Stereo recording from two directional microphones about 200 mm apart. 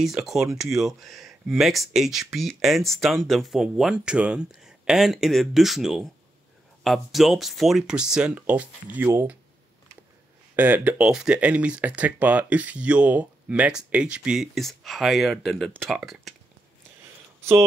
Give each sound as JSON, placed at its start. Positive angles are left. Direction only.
{"t": 0.0, "sound": "speech", "side_deg": 0}
{"t": 10.5, "sound": "speech", "side_deg": -10}